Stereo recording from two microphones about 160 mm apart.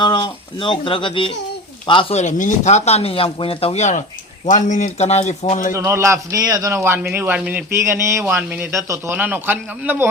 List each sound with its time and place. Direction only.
0.0 s speech: 30° left (ahead or behind)
5.7 s a man's voice: 15° right (ahead or behind)